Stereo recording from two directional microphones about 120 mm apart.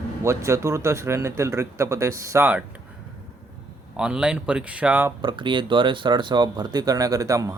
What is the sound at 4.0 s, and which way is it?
Speech, 5° right (ahead or behind).